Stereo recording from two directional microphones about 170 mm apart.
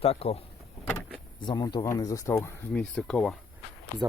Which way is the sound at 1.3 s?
25° left (ahead or behind).